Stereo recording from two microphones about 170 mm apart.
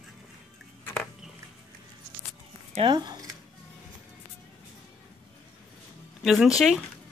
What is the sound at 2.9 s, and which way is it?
Speech, 25° right (ahead or behind).